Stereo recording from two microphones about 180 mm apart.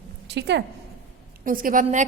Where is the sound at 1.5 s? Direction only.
50° right (ahead or behind).